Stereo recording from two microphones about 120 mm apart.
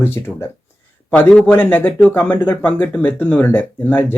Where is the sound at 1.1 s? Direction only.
10° left (ahead or behind).